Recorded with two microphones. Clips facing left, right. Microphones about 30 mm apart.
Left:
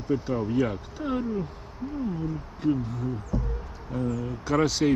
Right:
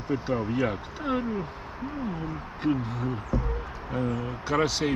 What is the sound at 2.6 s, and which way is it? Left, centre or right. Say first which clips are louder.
Speech: even; right.